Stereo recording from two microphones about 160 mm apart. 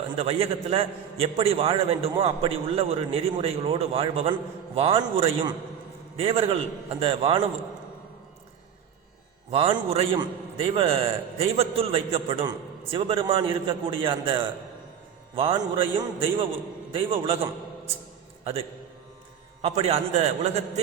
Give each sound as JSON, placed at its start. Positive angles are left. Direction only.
{"t": 0.2, "sound": "a man's voice", "side_deg": -40}
{"t": 9.5, "sound": "a man's voice", "side_deg": -35}
{"t": 19.6, "sound": "a man's voice", "side_deg": -40}